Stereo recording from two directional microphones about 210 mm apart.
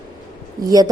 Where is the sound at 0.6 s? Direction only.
15° right (ahead or behind).